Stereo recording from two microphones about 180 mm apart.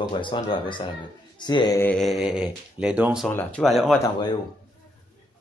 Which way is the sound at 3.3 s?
10° left (ahead or behind).